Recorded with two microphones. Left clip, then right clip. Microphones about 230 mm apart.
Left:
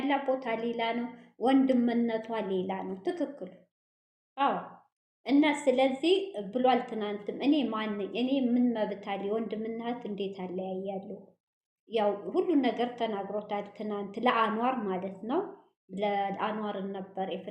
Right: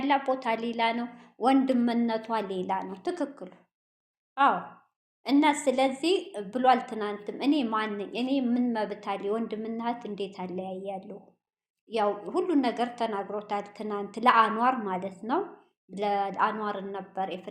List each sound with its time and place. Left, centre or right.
0.0 s a woman's voice: centre
5.2 s a woman's voice: centre